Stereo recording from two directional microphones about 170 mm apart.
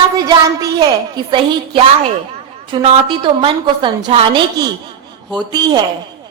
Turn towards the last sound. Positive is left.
turn(degrees=-25)  # may be behind; listen again after turning